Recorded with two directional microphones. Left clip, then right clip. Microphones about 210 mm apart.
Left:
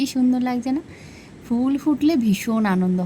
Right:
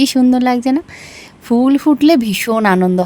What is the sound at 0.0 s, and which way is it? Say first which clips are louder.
A woman's voice: right 9 dB; 55° right (ahead or behind).